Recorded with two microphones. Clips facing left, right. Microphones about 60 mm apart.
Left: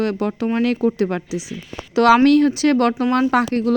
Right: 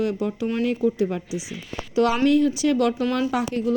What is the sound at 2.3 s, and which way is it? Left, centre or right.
Speech, left.